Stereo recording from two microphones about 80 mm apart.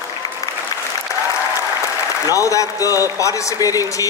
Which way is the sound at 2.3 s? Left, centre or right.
Left.